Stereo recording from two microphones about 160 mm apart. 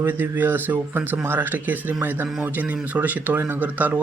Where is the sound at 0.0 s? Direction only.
10° right (ahead or behind).